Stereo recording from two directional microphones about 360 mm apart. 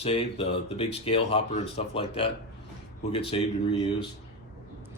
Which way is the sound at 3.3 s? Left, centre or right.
Centre.